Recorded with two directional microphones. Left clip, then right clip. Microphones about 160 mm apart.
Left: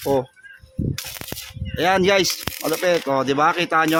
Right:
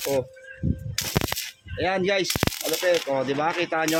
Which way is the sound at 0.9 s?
5° right (ahead or behind).